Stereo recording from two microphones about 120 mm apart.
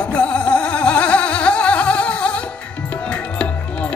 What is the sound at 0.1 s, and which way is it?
Music, 10° left (ahead or behind).